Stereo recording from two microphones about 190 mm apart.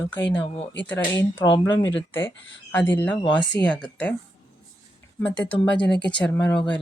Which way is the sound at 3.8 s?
5° left (ahead or behind).